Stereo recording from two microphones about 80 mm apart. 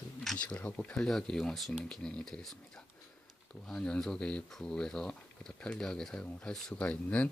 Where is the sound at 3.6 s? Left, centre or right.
Centre.